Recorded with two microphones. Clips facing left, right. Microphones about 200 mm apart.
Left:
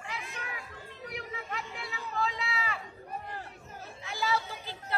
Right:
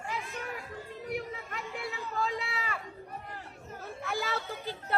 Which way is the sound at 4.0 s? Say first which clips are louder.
Left 2 dB; 55° right (ahead or behind).